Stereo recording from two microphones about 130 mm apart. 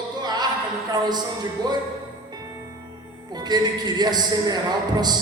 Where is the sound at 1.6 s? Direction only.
30° right (ahead or behind).